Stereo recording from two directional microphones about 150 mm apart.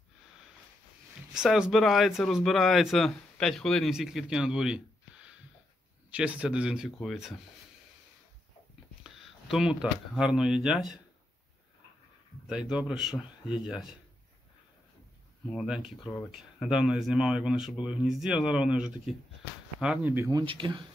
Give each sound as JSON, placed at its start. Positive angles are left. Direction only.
{"t": 1.3, "sound": "speech", "side_deg": -5}
{"t": 9.0, "sound": "speech", "side_deg": -5}
{"t": 12.4, "sound": "speech", "side_deg": -5}
{"t": 15.5, "sound": "speech", "side_deg": -5}
{"t": 20.2, "sound": "speech", "side_deg": -30}